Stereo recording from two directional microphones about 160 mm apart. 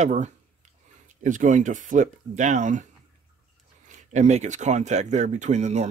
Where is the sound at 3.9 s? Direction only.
50° right (ahead or behind).